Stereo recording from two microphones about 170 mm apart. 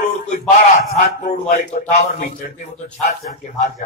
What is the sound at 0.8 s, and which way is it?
Speech, 45° left (ahead or behind).